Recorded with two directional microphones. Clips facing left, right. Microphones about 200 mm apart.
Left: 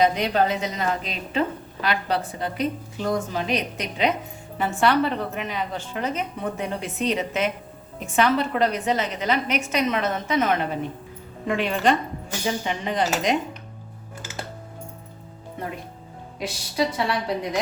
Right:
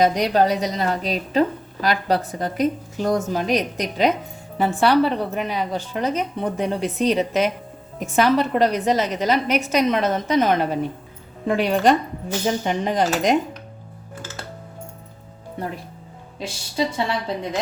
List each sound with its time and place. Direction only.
0.0 s a woman's voice: 40° right (ahead or behind)
16.4 s a woman's voice: 25° right (ahead or behind)